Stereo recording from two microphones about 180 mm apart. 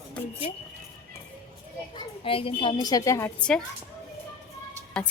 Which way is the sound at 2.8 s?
20° left (ahead or behind).